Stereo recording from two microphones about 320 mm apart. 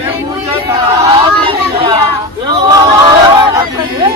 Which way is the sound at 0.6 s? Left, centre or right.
Centre.